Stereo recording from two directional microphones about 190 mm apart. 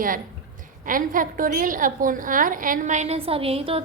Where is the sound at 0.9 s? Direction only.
45° right (ahead or behind).